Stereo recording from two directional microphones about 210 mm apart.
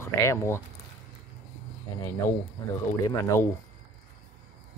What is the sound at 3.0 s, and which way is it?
Speech, 15° left (ahead or behind).